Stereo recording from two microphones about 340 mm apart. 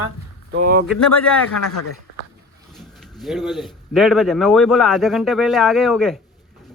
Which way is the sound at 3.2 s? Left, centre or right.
Centre.